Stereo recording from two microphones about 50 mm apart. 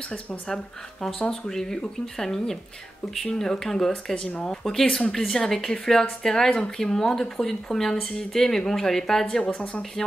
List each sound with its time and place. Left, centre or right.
1.5 s speech: centre
9.4 s speech: left
10.0 s speech: centre